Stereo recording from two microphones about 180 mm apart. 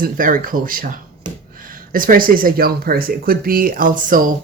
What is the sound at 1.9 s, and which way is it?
Speech, 50° right (ahead or behind).